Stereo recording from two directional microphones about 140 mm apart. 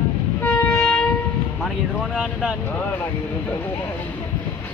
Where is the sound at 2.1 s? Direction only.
5° right (ahead or behind).